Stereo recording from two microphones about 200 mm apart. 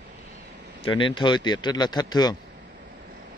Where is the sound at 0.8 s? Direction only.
25° left (ahead or behind).